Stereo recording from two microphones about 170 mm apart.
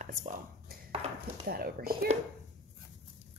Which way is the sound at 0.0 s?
50° right (ahead or behind).